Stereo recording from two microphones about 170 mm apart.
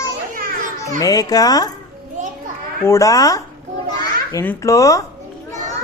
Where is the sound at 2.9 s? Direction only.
20° left (ahead or behind).